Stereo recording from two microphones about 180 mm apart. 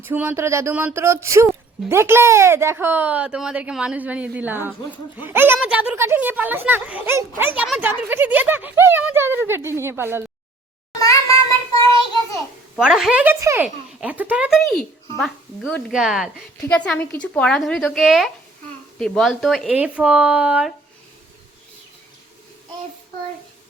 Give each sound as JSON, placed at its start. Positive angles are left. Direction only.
{"t": 0.0, "sound": "speech", "side_deg": -10}
{"t": 11.0, "sound": "child singing", "side_deg": 20}
{"t": 12.8, "sound": "speech", "side_deg": -5}